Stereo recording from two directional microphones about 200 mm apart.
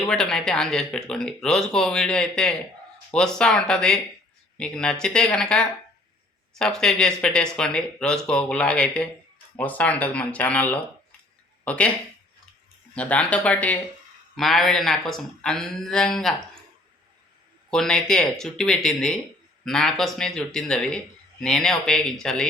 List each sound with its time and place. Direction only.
0.0 s speech: 5° left (ahead or behind)
12.9 s speech: 5° left (ahead or behind)
17.7 s speech: 5° left (ahead or behind)